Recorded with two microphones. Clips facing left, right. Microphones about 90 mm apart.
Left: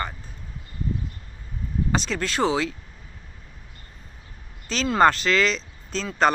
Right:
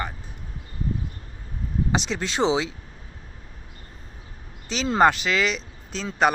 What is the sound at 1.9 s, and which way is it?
Speech, 20° right (ahead or behind).